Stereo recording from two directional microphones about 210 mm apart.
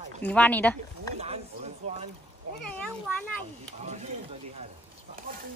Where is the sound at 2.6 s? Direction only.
5° left (ahead or behind).